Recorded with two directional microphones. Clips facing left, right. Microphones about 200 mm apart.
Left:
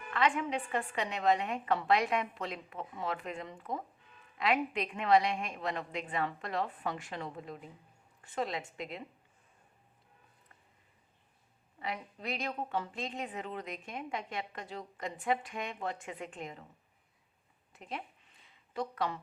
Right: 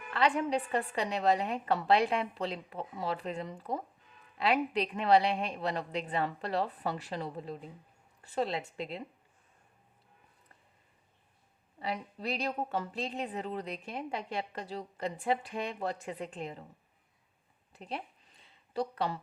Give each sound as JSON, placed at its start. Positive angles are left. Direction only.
{"t": 0.1, "sound": "a woman's voice", "side_deg": -35}
{"t": 11.8, "sound": "a woman's voice", "side_deg": -35}
{"t": 17.7, "sound": "a sound", "side_deg": -35}